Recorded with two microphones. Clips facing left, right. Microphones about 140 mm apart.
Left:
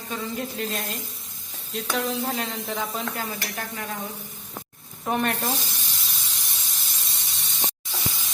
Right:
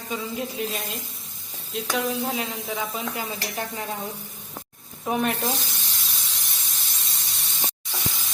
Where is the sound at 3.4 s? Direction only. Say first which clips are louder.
Right 2 dB; 20° right (ahead or behind).